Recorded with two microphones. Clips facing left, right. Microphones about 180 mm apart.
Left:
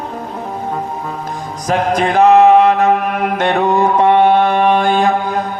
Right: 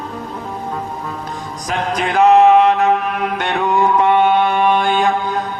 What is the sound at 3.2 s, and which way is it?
Mantra, 40° left (ahead or behind).